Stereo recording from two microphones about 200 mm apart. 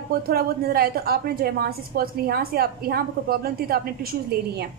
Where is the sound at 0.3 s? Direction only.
50° right (ahead or behind).